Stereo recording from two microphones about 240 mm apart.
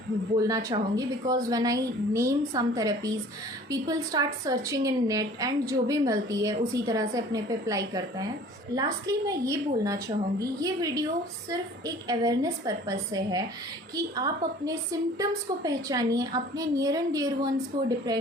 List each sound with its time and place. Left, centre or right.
0.3 s a woman's voice: centre
12.0 s a woman's voice: centre